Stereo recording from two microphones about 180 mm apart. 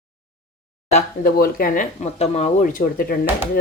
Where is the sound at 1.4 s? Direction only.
50° left (ahead or behind).